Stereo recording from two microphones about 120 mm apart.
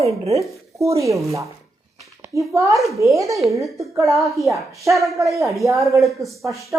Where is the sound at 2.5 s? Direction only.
25° right (ahead or behind).